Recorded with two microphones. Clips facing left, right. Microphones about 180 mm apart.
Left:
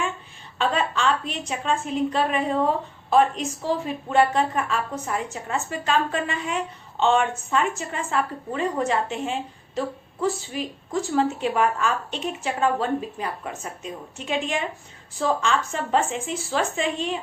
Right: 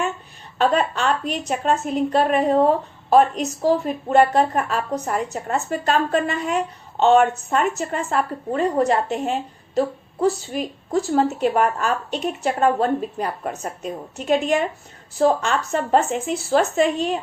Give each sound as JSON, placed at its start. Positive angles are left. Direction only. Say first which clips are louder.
{"t": 0.6, "sound": "a woman's voice", "louder": "right 4 dB", "side_deg": -45}